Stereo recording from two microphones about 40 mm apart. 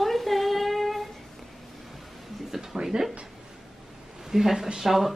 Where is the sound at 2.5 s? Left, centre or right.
Centre.